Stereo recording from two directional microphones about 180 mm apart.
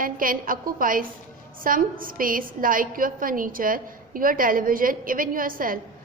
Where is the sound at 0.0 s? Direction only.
50° right (ahead or behind).